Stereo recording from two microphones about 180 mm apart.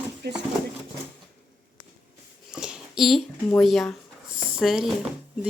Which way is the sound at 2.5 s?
5° right (ahead or behind).